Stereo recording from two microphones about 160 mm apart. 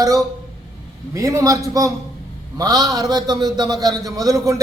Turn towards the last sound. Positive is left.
turn(degrees=-20)  # may be behind; listen again after turning